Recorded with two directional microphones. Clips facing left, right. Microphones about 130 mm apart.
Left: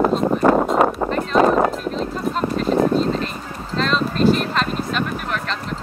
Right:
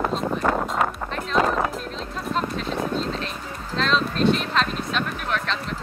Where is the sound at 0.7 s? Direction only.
35° left (ahead or behind).